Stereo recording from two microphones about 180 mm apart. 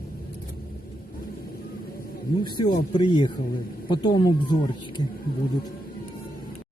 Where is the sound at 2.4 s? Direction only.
25° left (ahead or behind).